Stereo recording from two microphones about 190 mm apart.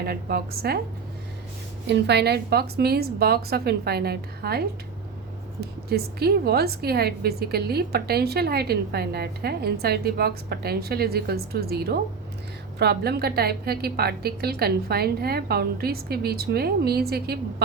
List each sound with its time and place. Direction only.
0.0 s a woman's voice: 55° right (ahead or behind)
1.9 s a woman's voice: 60° right (ahead or behind)